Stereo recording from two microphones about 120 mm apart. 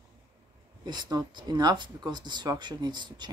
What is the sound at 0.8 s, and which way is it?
Speech, 40° right (ahead or behind).